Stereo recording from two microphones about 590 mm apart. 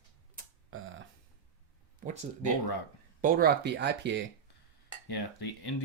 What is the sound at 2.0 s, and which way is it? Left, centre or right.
Speech, centre.